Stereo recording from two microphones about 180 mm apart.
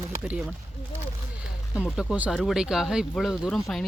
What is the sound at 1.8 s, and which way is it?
Speech, centre (ahead or behind).